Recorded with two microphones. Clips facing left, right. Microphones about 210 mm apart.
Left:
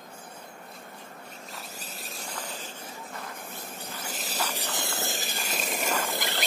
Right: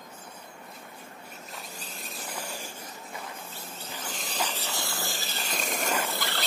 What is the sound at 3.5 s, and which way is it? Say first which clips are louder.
Wind: left 2 dB; 15° left (ahead or behind).